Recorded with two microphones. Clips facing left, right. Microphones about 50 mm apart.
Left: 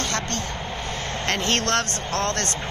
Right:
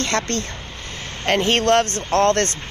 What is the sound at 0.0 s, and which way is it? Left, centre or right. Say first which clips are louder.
Speech: right 4 dB; right.